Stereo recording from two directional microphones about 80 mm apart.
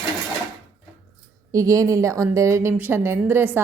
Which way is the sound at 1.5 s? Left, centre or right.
Right.